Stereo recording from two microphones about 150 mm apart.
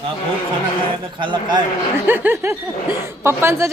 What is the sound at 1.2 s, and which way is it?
Speech, 35° right (ahead or behind).